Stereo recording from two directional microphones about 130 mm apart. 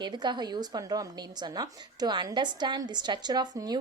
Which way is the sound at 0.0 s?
35° right (ahead or behind).